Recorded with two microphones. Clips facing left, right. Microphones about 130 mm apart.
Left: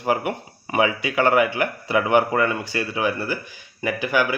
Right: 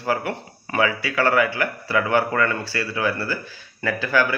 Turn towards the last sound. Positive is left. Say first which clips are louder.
# even
turn(degrees=15)  # may be behind; listen again after turning